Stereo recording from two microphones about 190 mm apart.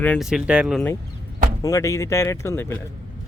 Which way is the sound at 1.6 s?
15° left (ahead or behind).